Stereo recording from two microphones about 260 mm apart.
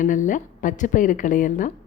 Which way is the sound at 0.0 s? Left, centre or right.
Left.